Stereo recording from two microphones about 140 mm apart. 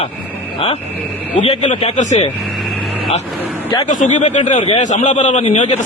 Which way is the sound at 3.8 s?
65° left (ahead or behind).